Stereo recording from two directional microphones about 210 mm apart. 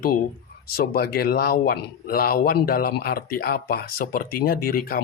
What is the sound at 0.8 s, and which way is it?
Speech, 50° left (ahead or behind).